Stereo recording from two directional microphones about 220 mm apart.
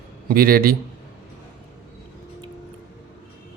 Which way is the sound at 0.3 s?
40° right (ahead or behind).